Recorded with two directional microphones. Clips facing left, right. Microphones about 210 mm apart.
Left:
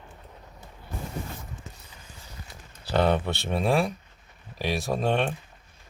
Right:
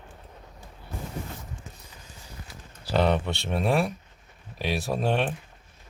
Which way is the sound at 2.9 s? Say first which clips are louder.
Even; centre (ahead or behind).